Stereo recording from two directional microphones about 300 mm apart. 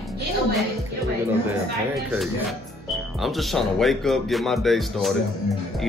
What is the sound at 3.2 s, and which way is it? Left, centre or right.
Speech, centre.